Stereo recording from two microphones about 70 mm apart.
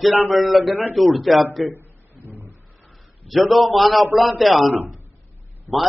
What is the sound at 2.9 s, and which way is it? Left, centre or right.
A man's voice, centre.